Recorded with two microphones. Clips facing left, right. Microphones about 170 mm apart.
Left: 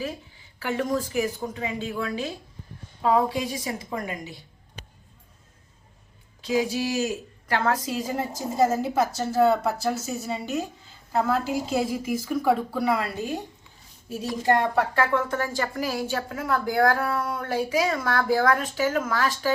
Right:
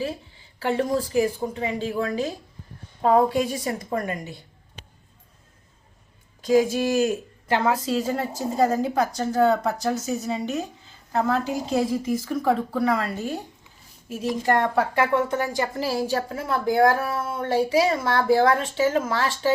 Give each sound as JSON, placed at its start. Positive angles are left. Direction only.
{"t": 0.0, "sound": "a woman's voice", "side_deg": -30}
{"t": 3.0, "sound": "a woman's voice", "side_deg": -50}
{"t": 6.4, "sound": "a woman's voice", "side_deg": -45}
{"t": 7.9, "sound": "a woman's voice", "side_deg": 15}
{"t": 14.9, "sound": "speech", "side_deg": -15}
{"t": 15.8, "sound": "a woman's voice", "side_deg": -35}